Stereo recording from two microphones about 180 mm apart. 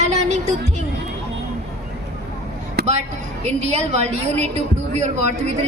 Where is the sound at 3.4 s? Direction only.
40° right (ahead or behind).